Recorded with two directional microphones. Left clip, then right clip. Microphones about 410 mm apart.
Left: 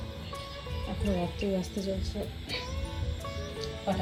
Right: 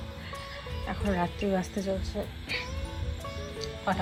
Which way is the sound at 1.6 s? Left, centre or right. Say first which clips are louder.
Right 3 dB; centre.